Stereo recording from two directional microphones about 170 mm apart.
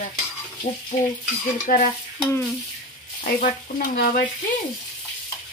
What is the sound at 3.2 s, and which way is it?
Frying, 55° left (ahead or behind).